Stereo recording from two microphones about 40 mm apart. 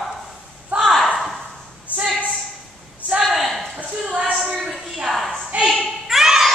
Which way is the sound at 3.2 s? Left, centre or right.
Centre.